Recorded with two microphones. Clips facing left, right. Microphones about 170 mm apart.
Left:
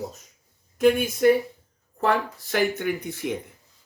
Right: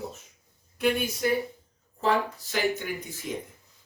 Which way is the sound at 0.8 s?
50° left (ahead or behind).